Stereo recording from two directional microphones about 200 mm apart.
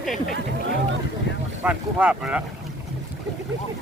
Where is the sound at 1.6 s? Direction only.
5° right (ahead or behind).